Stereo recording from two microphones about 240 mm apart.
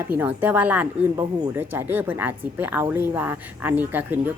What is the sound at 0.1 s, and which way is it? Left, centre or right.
A woman's voice, centre.